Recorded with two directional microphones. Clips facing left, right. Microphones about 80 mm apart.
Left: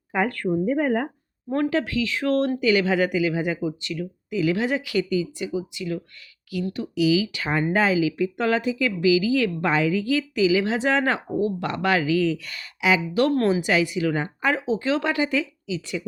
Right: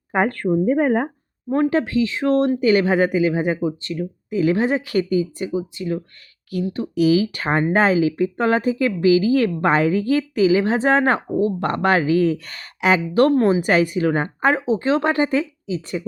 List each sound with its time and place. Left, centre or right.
0.1 s speech: right
2.6 s speech: right
13.3 s speech: right
13.6 s speech: right